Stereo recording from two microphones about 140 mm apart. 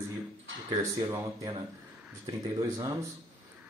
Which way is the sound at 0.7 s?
30° right (ahead or behind).